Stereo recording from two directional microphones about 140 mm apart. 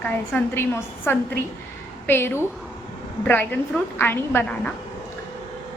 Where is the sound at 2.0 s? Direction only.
15° left (ahead or behind).